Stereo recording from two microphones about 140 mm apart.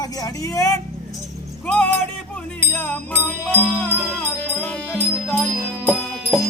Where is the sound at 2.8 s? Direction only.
10° left (ahead or behind).